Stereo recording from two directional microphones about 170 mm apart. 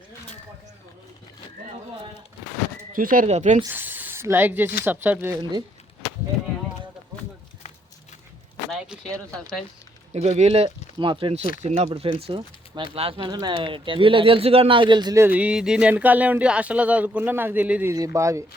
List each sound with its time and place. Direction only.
2.9 s speech: 55° right (ahead or behind)
3.7 s speech: 10° right (ahead or behind)
8.7 s a sound: centre (ahead or behind)
10.1 s speech: 40° right (ahead or behind); by 17.9 s 10° right (ahead or behind)
17.9 s speech: 20° right (ahead or behind)